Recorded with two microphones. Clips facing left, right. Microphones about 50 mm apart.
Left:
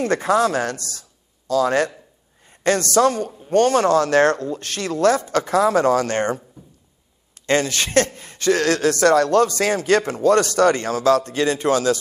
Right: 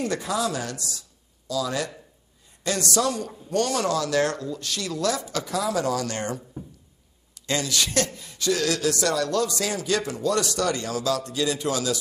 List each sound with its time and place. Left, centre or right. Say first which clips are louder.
0.0 s a woman's voice: left 8 dB; left